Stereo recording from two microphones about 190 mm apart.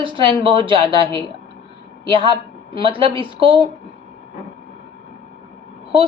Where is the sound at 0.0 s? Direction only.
25° right (ahead or behind).